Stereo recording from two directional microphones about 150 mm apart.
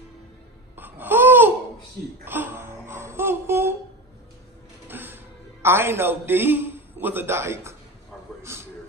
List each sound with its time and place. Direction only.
0.7 s babbling: 10° right (ahead or behind)
2.2 s music: 15° right (ahead or behind)
4.8 s a man's voice: 15° right (ahead or behind)
8.4 s a sound: 20° right (ahead or behind)